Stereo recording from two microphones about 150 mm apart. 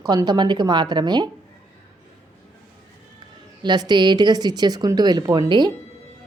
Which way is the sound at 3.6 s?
30° right (ahead or behind).